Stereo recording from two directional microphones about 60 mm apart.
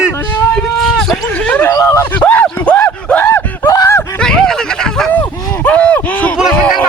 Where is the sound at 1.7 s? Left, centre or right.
Left.